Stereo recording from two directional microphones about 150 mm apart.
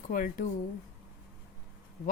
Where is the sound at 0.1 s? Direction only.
65° left (ahead or behind).